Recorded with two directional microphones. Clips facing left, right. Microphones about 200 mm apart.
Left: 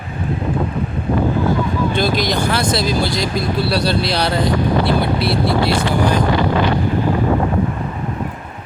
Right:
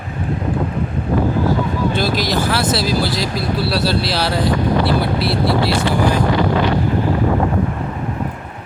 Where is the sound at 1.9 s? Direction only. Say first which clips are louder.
Left 2 dB; 5° right (ahead or behind).